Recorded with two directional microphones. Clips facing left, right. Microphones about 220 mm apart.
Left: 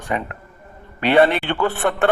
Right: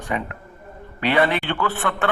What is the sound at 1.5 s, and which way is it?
Speech, 45° left (ahead or behind).